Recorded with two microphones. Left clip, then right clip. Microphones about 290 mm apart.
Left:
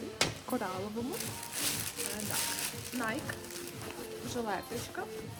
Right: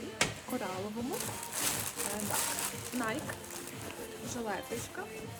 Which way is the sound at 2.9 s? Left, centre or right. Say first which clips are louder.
Even; centre.